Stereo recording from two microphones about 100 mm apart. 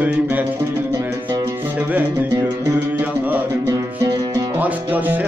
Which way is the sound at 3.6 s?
30° right (ahead or behind).